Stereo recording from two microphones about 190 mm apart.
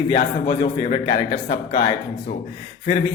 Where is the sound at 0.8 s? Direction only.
30° left (ahead or behind).